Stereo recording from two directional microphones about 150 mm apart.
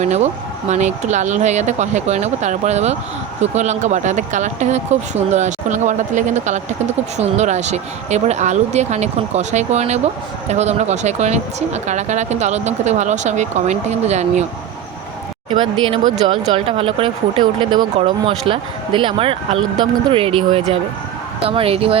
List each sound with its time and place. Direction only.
0.0 s speech: 50° right (ahead or behind)
15.4 s speech: 35° right (ahead or behind)